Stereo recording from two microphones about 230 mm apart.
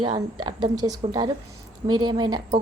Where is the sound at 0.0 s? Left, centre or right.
Right.